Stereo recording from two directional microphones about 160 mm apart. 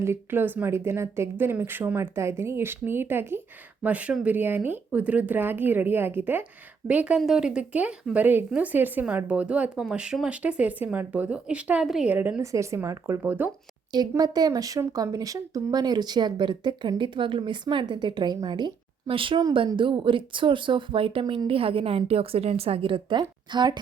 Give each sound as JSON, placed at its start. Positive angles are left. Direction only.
{"t": 0.0, "sound": "speech", "side_deg": -15}
{"t": 13.9, "sound": "speech", "side_deg": -25}